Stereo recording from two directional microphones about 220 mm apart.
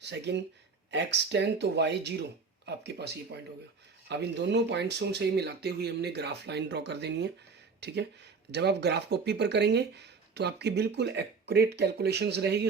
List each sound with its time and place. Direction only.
0.0 s speech: 50° right (ahead or behind)